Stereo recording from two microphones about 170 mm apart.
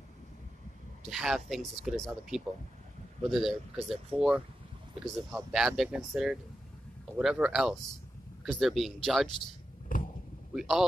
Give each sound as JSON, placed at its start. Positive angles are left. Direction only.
{"t": 1.1, "sound": "speech", "side_deg": 0}
{"t": 9.9, "sound": "vehicle", "side_deg": 55}
{"t": 10.5, "sound": "a man's voice", "side_deg": 0}